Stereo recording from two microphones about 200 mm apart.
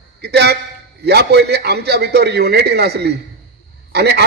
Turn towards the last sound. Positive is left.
turn(degrees=-55)  # may be behind; listen again after turning